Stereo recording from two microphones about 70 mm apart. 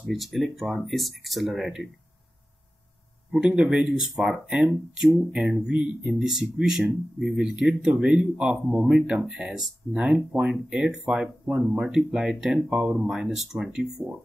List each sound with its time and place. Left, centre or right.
0.1 s speech: centre
3.3 s speech: centre
6.2 s speech: centre
10.5 s speech: centre